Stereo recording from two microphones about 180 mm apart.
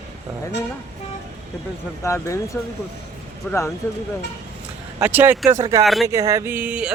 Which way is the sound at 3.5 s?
15° left (ahead or behind).